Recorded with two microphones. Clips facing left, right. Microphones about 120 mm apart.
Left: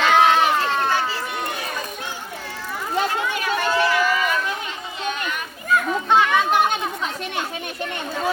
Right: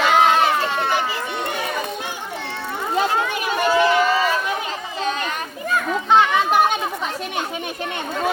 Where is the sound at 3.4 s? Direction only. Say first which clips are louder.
Right 4 dB; 15° right (ahead or behind); by 4.4 s 30° right (ahead or behind).